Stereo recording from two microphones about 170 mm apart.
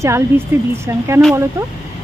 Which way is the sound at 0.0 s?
15° right (ahead or behind).